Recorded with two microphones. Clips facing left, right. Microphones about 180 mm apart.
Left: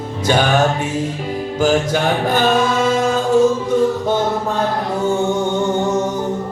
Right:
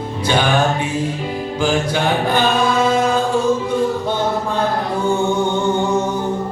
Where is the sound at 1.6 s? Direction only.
45° left (ahead or behind).